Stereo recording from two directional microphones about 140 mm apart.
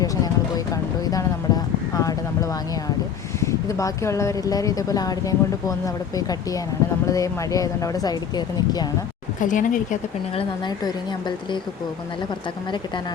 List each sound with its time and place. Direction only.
0.5 s speech: 25° left (ahead or behind)
1.9 s a sound: 25° left (ahead or behind)
3.4 s speech: 20° left (ahead or behind)
9.4 s speech: 70° left (ahead or behind)
10.7 s a woman's voice: 30° left (ahead or behind)